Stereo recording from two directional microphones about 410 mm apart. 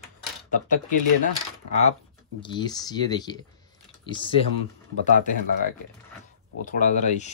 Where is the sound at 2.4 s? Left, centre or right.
Centre.